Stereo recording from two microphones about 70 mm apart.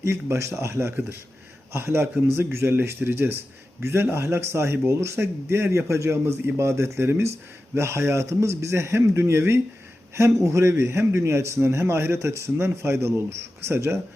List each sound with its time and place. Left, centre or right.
0.0 s a man's voice: right